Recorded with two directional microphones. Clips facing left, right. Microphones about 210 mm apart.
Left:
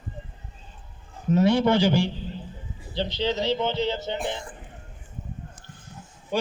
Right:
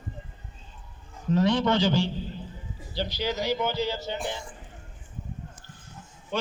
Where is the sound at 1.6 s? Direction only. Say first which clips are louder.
Left 3 dB; 10° left (ahead or behind).